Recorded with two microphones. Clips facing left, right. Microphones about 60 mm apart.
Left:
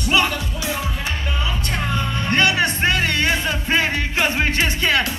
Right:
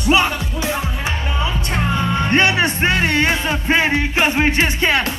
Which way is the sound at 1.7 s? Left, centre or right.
Right.